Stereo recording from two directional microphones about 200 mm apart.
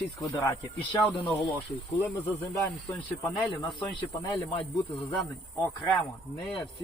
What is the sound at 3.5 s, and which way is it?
Speech, 25° left (ahead or behind).